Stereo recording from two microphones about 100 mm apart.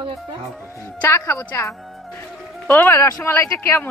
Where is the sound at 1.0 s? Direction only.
30° left (ahead or behind).